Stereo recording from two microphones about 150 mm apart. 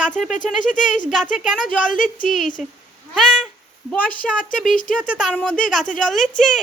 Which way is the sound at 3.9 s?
10° left (ahead or behind).